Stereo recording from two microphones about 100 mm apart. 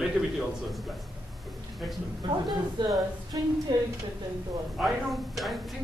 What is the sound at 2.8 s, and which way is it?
Speech, 50° right (ahead or behind).